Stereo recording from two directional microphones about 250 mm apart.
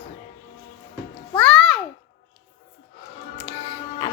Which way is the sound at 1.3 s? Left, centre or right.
Centre.